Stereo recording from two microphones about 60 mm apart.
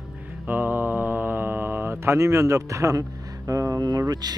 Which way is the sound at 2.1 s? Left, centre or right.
Right.